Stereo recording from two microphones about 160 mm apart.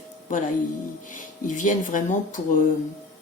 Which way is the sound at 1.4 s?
55° left (ahead or behind).